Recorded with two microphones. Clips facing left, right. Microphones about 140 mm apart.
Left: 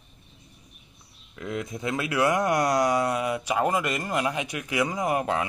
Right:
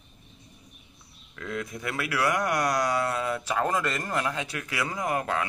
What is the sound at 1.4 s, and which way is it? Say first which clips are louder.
Speech: left 2 dB; 20° left (ahead or behind).